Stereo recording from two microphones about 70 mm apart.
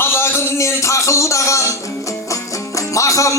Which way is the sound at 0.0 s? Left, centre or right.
Left.